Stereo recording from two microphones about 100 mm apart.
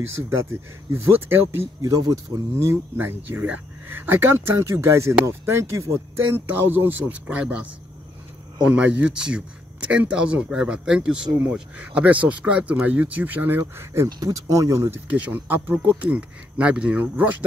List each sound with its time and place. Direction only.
0.4 s speech: 25° right (ahead or behind)
1.8 s speech: 35° right (ahead or behind); by 7.6 s 10° right (ahead or behind)
8.7 s speech: 10° right (ahead or behind)
14.0 s speech: 35° right (ahead or behind)
15.0 s speech: 15° right (ahead or behind)